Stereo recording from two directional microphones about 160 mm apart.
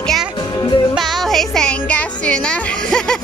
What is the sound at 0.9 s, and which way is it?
Music, centre (ahead or behind).